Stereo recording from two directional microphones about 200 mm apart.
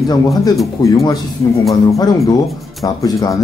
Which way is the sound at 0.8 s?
20° left (ahead or behind).